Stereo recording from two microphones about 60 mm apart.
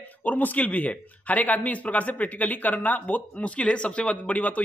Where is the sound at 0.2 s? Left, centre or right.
Left.